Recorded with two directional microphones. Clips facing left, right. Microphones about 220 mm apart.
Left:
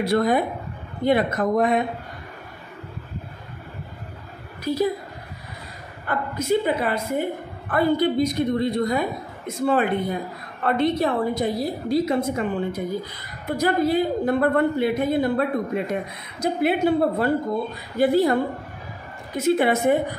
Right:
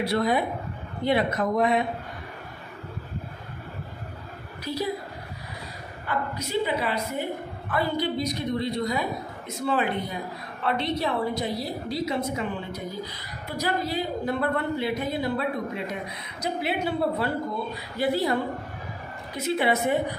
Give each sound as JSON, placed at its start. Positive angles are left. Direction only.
{"t": 0.0, "sound": "a woman's voice", "side_deg": 45}
{"t": 4.7, "sound": "a woman's voice", "side_deg": 50}
{"t": 6.0, "sound": "a woman's voice", "side_deg": 50}